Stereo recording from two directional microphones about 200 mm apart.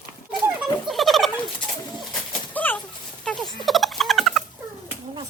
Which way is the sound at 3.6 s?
Centre (ahead or behind).